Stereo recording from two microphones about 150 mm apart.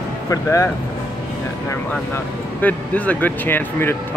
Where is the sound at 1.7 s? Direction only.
15° left (ahead or behind).